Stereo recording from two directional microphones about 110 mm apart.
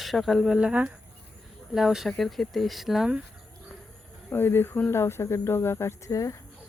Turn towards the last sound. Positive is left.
turn(degrees=30)  # may be behind; listen again after turning